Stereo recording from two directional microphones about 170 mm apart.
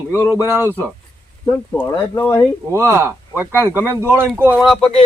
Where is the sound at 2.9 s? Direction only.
15° right (ahead or behind).